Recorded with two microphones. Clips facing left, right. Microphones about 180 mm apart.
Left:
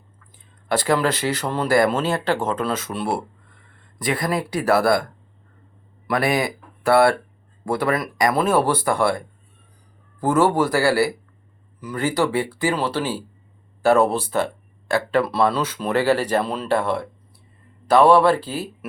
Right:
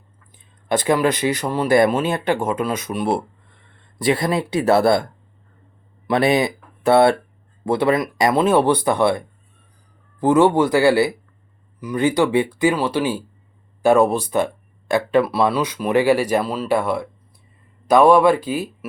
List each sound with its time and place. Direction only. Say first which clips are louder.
0.7 s speech: right 2 dB; 20° right (ahead or behind)